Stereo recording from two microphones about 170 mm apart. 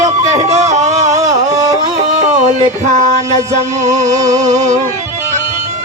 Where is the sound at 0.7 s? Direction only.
40° right (ahead or behind).